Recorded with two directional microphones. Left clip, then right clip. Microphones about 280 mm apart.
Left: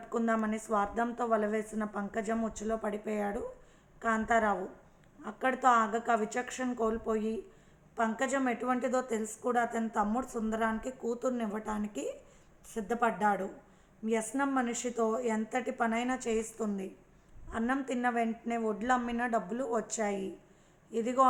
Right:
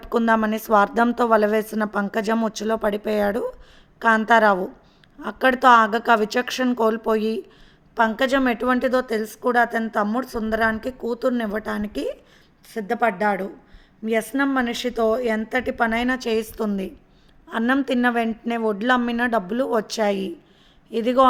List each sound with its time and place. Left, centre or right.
0.1 s a woman's voice: right